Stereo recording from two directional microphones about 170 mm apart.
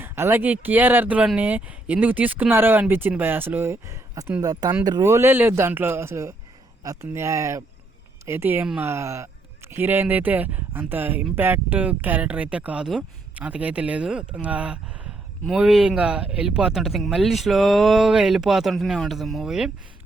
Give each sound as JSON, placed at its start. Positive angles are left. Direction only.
{"t": 0.0, "sound": "speech", "side_deg": -15}